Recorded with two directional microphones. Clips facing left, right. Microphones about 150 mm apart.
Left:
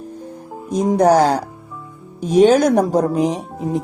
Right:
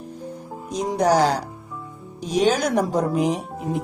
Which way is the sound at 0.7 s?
50° left (ahead or behind).